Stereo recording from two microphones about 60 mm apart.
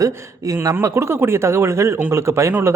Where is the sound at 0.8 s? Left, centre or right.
Right.